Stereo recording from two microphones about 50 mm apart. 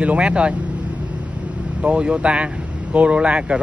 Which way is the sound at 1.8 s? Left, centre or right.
Right.